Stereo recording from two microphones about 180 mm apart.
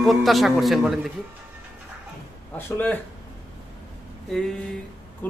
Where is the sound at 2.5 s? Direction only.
10° left (ahead or behind).